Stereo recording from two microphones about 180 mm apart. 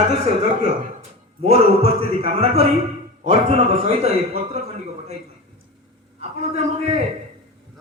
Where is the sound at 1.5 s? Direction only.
35° right (ahead or behind).